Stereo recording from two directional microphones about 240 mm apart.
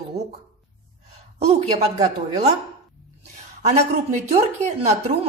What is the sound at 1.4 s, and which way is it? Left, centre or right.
A woman's voice, right.